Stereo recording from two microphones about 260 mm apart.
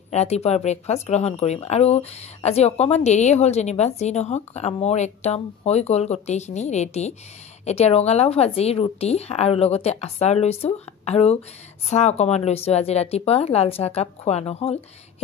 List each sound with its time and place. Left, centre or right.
0.1 s speech: left